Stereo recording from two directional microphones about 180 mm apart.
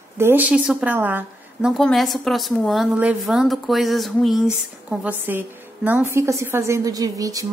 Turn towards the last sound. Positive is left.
turn(degrees=-20)  # may be behind; listen again after turning